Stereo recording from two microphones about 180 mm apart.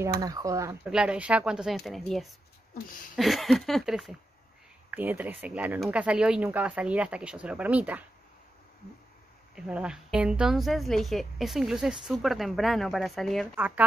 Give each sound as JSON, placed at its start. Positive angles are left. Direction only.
{"t": 0.2, "sound": "speech", "side_deg": -20}
{"t": 0.8, "sound": "a woman's voice", "side_deg": -5}
{"t": 9.6, "sound": "a woman's voice", "side_deg": -5}